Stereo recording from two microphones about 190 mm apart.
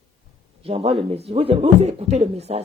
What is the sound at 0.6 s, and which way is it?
A man's voice, 30° right (ahead or behind).